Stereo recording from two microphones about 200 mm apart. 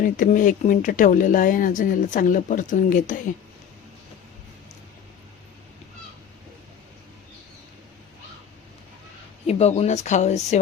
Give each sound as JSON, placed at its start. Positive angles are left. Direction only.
{"t": 0.0, "sound": "speech", "side_deg": 40}
{"t": 9.5, "sound": "speech", "side_deg": 30}